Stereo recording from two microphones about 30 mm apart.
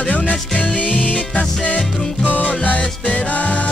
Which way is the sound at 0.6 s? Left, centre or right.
Left.